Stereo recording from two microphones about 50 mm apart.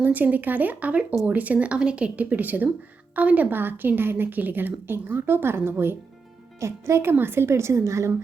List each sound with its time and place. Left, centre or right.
0.0 s speech: right
2.3 s a woman's voice: right
6.6 s a woman's voice: right
7.9 s a woman's voice: right